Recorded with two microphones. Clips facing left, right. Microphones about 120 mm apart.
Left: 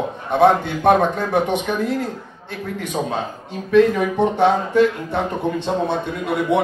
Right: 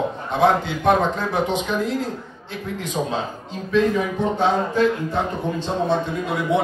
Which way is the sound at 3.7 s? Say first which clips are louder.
Left 5 dB; 60° left (ahead or behind).